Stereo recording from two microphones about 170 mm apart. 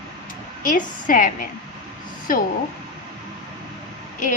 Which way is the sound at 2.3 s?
55° left (ahead or behind).